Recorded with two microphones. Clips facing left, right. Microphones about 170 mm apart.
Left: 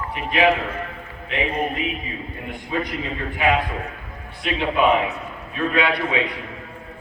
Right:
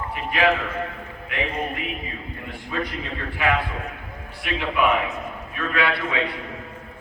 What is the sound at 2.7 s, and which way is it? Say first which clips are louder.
A man's voice: left 3 dB; 20° left (ahead or behind).